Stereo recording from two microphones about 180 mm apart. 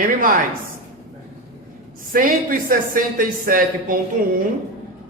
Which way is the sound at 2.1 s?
50° right (ahead or behind).